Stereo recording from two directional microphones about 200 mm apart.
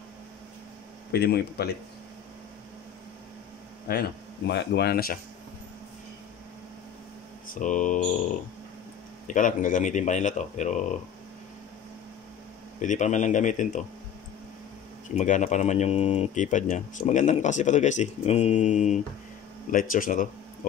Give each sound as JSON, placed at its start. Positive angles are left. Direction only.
{"t": 1.1, "sound": "speech", "side_deg": 55}
{"t": 3.8, "sound": "speech", "side_deg": 50}
{"t": 7.5, "sound": "speech", "side_deg": 40}
{"t": 9.3, "sound": "speech", "side_deg": 40}
{"t": 12.8, "sound": "speech", "side_deg": 40}
{"t": 15.1, "sound": "speech", "side_deg": 40}